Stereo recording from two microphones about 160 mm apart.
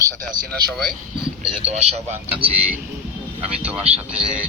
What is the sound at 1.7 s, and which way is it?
Speech, 40° right (ahead or behind).